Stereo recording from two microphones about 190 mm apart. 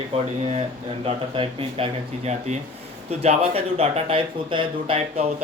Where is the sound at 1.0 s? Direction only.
30° right (ahead or behind).